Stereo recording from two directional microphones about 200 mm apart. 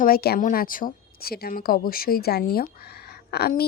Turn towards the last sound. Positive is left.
turn(degrees=50)  # may be behind; listen again after turning